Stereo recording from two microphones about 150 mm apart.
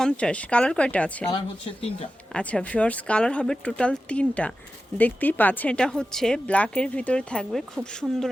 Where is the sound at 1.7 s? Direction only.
40° left (ahead or behind).